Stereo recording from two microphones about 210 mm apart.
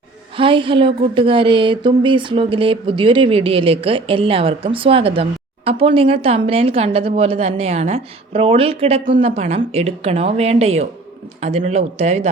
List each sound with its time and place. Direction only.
0.3 s a man's voice: 25° right (ahead or behind)